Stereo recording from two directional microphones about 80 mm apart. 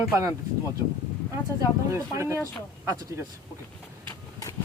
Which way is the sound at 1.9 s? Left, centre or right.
Right.